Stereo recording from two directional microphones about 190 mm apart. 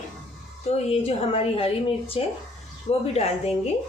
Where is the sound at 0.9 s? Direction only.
30° left (ahead or behind).